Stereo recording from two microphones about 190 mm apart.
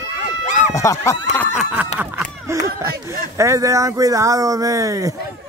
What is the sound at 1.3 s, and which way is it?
Snicker, 5° left (ahead or behind).